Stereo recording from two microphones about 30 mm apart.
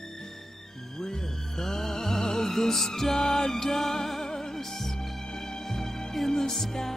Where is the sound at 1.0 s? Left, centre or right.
Centre.